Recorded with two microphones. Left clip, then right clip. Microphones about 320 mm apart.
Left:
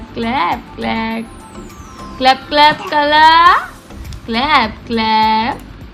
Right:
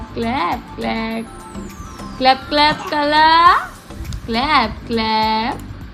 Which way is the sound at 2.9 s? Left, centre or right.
Centre.